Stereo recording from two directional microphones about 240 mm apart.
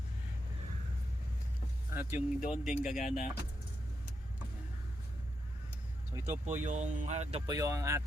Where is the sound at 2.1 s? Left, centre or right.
Left.